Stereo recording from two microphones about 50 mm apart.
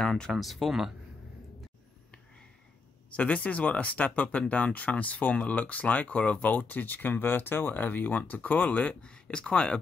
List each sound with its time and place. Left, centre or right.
0.0 s speech: centre
0.3 s speech: centre
3.1 s speech: left